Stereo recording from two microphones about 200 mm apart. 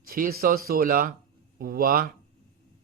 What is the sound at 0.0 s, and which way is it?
Speech, 50° right (ahead or behind).